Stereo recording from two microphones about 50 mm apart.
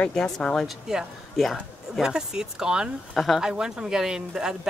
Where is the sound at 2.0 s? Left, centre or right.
Centre.